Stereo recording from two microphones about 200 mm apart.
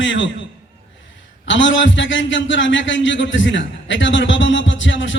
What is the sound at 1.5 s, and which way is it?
A man's voice, 65° left (ahead or behind).